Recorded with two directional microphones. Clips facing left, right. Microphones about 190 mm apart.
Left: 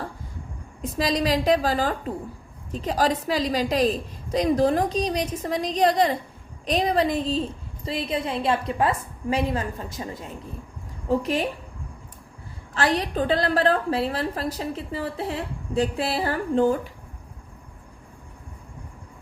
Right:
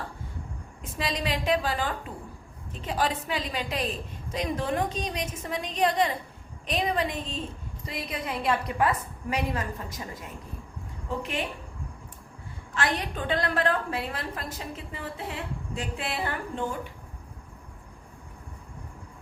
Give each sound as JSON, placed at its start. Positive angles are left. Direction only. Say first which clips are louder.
{"t": 0.8, "sound": "a woman's voice", "louder": "left 8 dB", "side_deg": 35}
{"t": 12.7, "sound": "a woman's voice", "louder": "left 6 dB", "side_deg": 35}